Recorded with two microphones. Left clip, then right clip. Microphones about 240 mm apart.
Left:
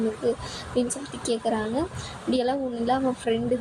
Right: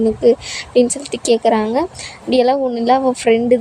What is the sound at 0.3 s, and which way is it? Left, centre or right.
A woman's voice, right.